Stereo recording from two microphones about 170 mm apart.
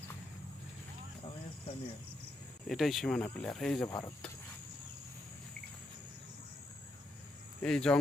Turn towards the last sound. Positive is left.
turn(degrees=5)  # may be behind; listen again after turning